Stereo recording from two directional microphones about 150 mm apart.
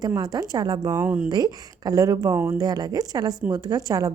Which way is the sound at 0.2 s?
25° right (ahead or behind).